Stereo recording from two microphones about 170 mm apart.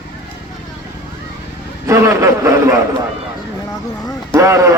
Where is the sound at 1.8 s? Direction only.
15° right (ahead or behind).